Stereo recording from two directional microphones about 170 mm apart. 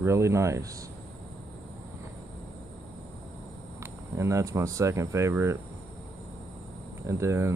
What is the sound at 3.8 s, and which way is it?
Speech, 15° right (ahead or behind).